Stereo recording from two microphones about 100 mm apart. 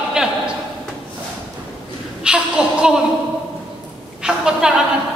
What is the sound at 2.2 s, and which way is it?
Speech, 10° right (ahead or behind).